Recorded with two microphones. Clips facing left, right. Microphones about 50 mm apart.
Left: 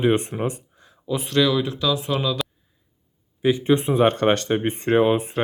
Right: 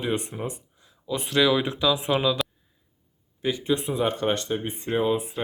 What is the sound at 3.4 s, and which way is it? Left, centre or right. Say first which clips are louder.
Speech: left 6 dB; left.